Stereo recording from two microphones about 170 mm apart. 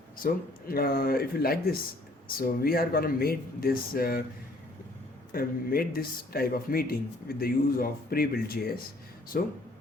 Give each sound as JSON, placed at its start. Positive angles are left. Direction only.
{"t": 0.7, "sound": "speech", "side_deg": 60}
{"t": 5.3, "sound": "speech", "side_deg": 60}